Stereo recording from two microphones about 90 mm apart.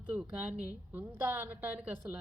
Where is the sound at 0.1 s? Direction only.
10° right (ahead or behind).